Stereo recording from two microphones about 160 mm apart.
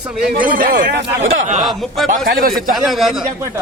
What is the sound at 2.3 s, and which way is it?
Speech, 65° right (ahead or behind).